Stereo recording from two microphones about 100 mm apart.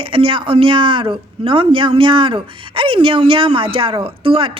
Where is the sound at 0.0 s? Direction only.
65° right (ahead or behind).